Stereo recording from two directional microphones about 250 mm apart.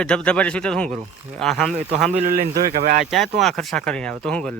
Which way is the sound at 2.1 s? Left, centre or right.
Right.